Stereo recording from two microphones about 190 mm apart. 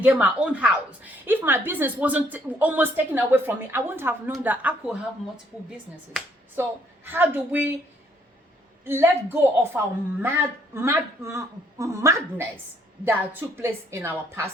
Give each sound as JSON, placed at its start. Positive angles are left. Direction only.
{"t": 0.0, "sound": "a woman's voice", "side_deg": -10}
{"t": 6.6, "sound": "a woman's voice", "side_deg": -10}
{"t": 8.8, "sound": "a woman's voice", "side_deg": -10}